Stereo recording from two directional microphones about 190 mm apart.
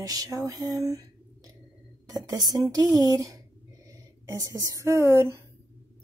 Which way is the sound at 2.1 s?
20° right (ahead or behind).